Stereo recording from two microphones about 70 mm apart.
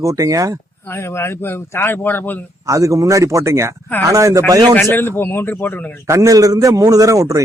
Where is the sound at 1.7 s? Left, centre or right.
Left.